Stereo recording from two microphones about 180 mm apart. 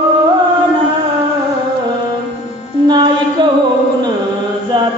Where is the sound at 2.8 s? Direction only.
25° right (ahead or behind).